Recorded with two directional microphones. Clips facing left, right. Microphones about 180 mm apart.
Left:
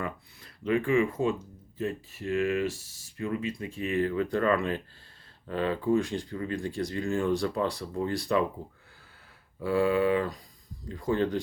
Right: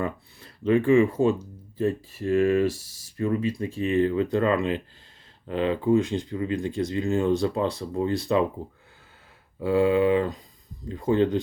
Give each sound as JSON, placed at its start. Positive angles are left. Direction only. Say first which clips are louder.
{"t": 0.0, "sound": "speech", "louder": "right 6 dB", "side_deg": -30}
{"t": 9.6, "sound": "speech", "louder": "right 4 dB", "side_deg": -20}